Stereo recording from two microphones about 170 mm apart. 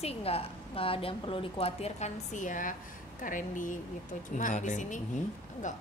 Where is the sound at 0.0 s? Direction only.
35° left (ahead or behind).